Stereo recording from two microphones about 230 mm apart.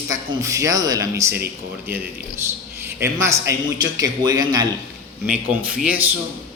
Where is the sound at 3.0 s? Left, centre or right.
Centre.